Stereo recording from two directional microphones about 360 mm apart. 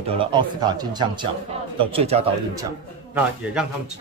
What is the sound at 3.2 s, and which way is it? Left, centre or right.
Speech, centre.